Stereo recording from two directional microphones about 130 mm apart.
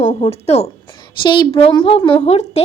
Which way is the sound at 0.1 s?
60° left (ahead or behind).